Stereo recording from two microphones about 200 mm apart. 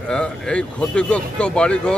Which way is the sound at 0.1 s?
5° left (ahead or behind).